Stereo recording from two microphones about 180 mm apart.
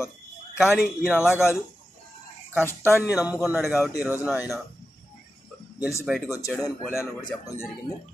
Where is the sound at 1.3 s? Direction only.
15° left (ahead or behind).